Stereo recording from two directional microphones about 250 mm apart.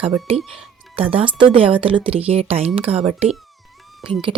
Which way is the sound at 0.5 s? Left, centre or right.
Right.